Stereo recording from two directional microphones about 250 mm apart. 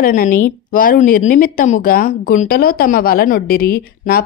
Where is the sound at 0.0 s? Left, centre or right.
Left.